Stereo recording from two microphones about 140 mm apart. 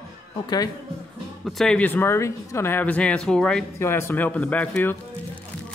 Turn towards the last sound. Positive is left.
turn(degrees=10)  # may be behind; listen again after turning